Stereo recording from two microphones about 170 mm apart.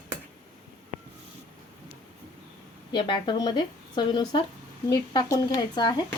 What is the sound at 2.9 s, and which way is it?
Speech, 30° left (ahead or behind).